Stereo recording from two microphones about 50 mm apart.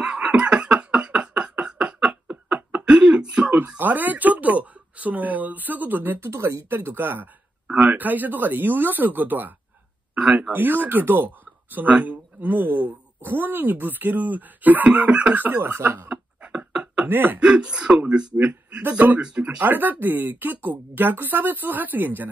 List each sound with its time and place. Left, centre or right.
0.0 s a sound: right
3.5 s speech: right
6.1 s speech: right
6.7 s speech: right
7.6 s speech: right
10.5 s speech: right
15.3 s speech: right
16.1 s a sound: right
17.0 s speech: right
17.4 s speech: centre
18.8 s speech: right
19.2 s speech: right
19.6 s speech: right